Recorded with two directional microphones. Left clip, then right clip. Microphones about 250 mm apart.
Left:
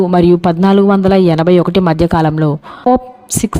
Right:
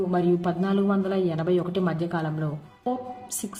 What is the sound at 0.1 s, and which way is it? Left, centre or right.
A woman's voice, left.